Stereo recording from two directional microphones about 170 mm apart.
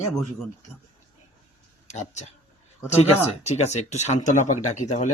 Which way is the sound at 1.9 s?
40° left (ahead or behind).